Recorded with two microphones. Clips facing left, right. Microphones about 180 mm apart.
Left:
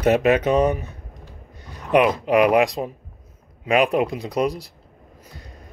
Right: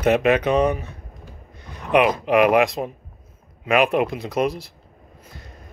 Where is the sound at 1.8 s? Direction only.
35° left (ahead or behind).